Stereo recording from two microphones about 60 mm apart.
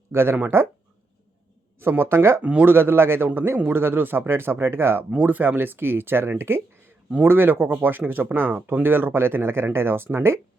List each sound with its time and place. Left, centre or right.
0.1 s speech: right
1.8 s speech: right
2.4 s a man's voice: right
2.7 s speech: right
5.1 s speech: right